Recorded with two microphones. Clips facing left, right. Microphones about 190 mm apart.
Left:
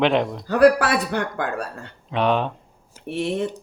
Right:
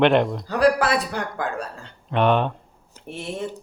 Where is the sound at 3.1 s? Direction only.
65° left (ahead or behind).